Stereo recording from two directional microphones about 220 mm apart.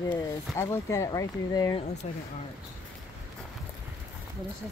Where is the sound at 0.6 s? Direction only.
15° left (ahead or behind).